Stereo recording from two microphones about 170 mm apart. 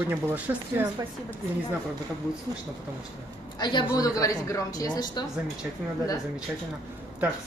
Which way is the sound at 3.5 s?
25° left (ahead or behind).